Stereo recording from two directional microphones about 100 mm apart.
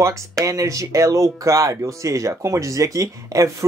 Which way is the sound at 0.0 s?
30° right (ahead or behind).